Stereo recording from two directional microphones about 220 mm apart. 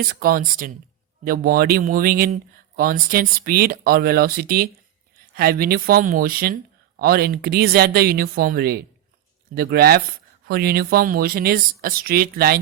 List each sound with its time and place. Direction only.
0.0 s a man's voice: 40° right (ahead or behind)